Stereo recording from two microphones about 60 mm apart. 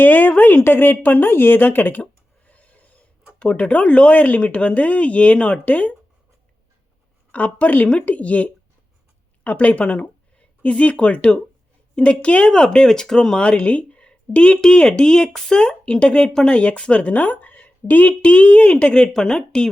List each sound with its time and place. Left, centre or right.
0.0 s speech: left
2.5 s rub: left
3.3 s speech: centre
7.3 s speech: left